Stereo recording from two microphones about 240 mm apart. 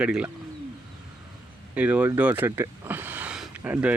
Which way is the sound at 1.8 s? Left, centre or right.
Centre.